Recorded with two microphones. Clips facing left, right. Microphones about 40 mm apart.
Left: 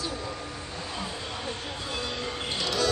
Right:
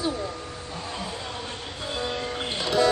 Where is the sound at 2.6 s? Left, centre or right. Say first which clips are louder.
Right 6 dB; right.